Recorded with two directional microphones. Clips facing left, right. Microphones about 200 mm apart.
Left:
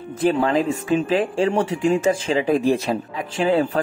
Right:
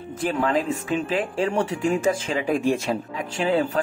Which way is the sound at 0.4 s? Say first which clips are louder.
Left 3 dB; 35° left (ahead or behind).